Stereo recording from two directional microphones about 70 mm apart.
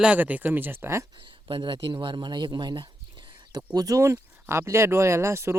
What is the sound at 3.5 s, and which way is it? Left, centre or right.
Speech, right.